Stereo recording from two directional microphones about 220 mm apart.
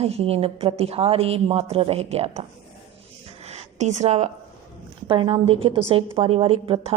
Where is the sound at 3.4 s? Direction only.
30° right (ahead or behind).